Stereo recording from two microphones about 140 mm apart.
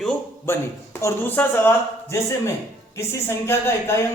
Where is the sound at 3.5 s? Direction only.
15° left (ahead or behind).